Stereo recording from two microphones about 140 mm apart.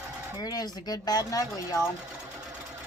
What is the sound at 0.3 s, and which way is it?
Speech, 30° left (ahead or behind).